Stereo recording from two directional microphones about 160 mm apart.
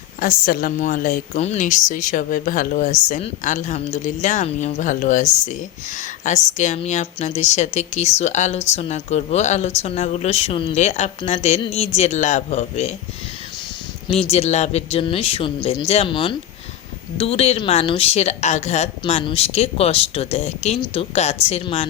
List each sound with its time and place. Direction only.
0.2 s a woman's voice: 65° left (ahead or behind); by 10.8 s 35° left (ahead or behind)
10.8 s a woman's voice: 45° left (ahead or behind)
14.3 s a woman's voice: 45° left (ahead or behind)